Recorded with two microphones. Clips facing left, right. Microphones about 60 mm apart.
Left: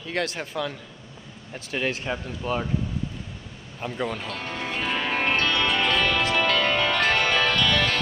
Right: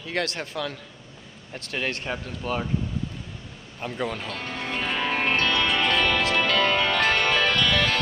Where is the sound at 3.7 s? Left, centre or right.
Centre.